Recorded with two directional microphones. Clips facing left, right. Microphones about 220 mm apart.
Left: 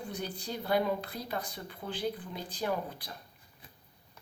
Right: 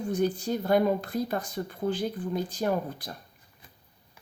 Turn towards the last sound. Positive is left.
turn(degrees=-45)  # may be behind; listen again after turning